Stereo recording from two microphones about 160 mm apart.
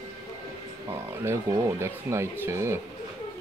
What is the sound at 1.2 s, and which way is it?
Speech, 15° right (ahead or behind).